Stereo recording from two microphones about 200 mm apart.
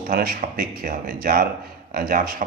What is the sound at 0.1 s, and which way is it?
A man's voice, 45° right (ahead or behind).